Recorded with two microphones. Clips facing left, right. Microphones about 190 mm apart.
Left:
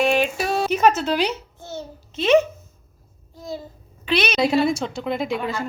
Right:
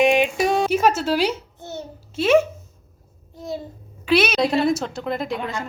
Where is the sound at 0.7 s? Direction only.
5° right (ahead or behind).